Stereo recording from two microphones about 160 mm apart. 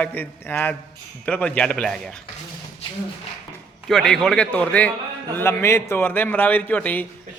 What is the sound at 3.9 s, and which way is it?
A man's voice, 5° left (ahead or behind).